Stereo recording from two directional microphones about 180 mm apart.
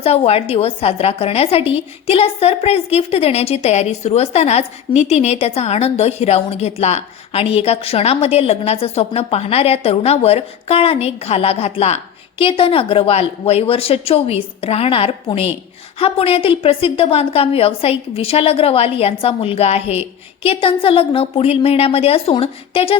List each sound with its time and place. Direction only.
0.0 s a woman's voice: 35° left (ahead or behind)